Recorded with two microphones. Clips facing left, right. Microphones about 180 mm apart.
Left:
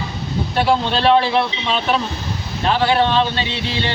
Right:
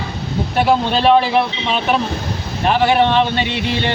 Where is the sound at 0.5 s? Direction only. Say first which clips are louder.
Right 2 dB; 10° right (ahead or behind).